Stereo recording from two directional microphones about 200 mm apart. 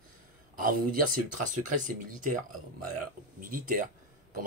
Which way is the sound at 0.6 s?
45° right (ahead or behind).